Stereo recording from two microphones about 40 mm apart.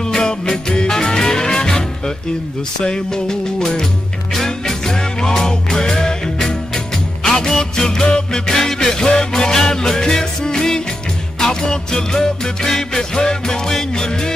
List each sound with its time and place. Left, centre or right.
0.0 s music: centre